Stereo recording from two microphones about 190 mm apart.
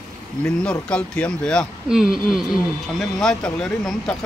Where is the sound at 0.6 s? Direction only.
5° left (ahead or behind).